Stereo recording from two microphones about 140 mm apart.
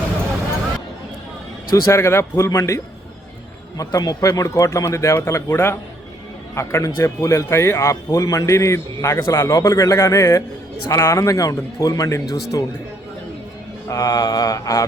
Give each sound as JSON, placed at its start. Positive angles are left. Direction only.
{"t": 1.7, "sound": "speech", "side_deg": 20}
{"t": 13.8, "sound": "speech", "side_deg": 25}